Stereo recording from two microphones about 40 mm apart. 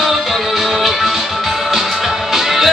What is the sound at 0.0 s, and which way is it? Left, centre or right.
Music, centre.